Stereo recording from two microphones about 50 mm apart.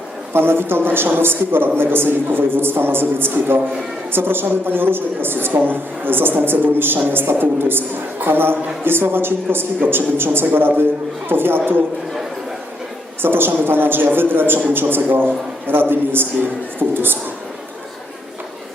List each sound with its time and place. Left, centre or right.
0.3 s a woman's voice: right
13.2 s a woman's voice: right